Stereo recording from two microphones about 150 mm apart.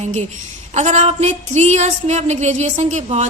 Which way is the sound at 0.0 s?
50° right (ahead or behind).